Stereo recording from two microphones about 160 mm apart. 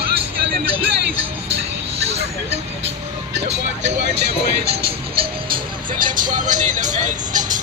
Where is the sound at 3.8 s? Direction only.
90° right.